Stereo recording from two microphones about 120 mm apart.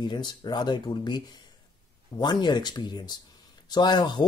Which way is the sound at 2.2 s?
40° left (ahead or behind).